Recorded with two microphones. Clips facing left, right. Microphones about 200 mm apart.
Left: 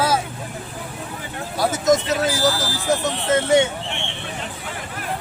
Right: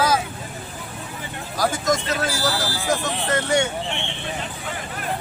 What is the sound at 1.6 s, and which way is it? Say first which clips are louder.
Speech: left 4 dB; 20° left (ahead or behind).